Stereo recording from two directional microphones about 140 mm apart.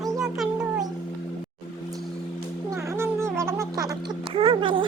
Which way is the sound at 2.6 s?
20° right (ahead or behind).